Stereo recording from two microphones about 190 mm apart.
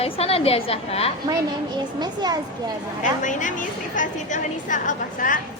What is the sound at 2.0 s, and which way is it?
Speech, 20° right (ahead or behind).